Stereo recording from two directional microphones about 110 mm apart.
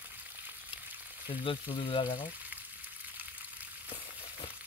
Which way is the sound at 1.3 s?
50° left (ahead or behind).